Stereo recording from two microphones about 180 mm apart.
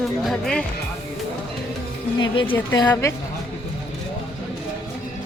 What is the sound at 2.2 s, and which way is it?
Speech, 30° left (ahead or behind).